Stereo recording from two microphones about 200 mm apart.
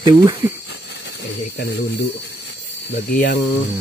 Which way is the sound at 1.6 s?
55° left (ahead or behind).